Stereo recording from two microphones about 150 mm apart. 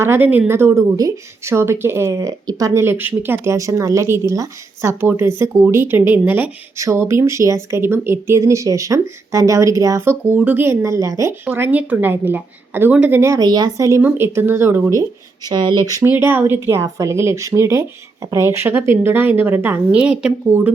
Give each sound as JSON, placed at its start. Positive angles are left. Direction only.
{"t": 0.0, "sound": "a woman's voice", "side_deg": -15}
{"t": 15.4, "sound": "a woman's voice", "side_deg": -30}